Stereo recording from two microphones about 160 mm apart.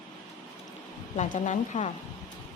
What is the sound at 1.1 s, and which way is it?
Speech, 50° left (ahead or behind).